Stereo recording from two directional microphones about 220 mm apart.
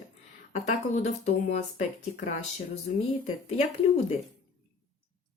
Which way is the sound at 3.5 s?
30° left (ahead or behind).